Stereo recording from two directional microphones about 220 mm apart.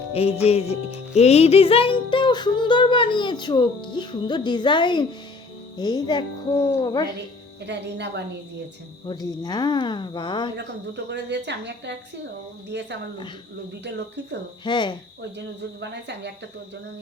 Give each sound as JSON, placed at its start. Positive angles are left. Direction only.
{"t": 0.1, "sound": "music", "side_deg": 25}
{"t": 7.6, "sound": "a woman's voice", "side_deg": -50}
{"t": 9.0, "sound": "music", "side_deg": 20}
{"t": 10.6, "sound": "a woman's voice", "side_deg": -50}
{"t": 14.6, "sound": "music", "side_deg": 20}
{"t": 15.8, "sound": "a woman's voice", "side_deg": -50}